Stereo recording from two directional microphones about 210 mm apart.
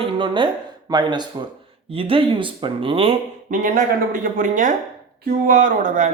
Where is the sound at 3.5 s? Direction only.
40° right (ahead or behind).